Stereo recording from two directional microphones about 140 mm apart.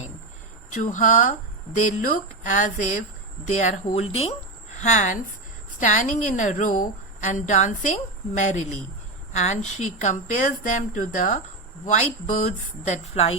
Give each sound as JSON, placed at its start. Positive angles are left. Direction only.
{"t": 0.7, "sound": "a woman's voice", "side_deg": 65}